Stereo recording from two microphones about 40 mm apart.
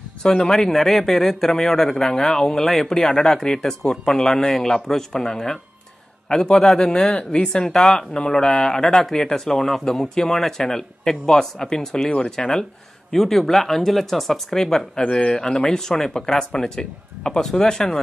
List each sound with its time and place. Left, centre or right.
0.2 s a man's voice: centre
15.0 s a man's voice: left
15.3 s a man's voice: centre